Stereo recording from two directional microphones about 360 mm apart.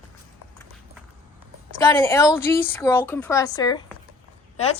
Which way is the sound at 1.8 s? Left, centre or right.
Centre.